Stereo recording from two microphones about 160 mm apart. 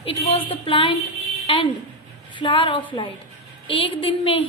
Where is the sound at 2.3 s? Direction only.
30° left (ahead or behind).